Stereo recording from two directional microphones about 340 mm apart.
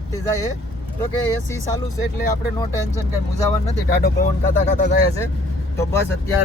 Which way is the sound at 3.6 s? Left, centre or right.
Left.